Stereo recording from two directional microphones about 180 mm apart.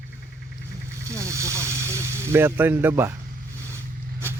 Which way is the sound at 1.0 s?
15° right (ahead or behind).